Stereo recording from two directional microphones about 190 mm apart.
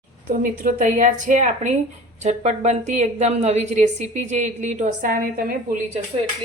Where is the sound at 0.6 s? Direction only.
45° right (ahead or behind).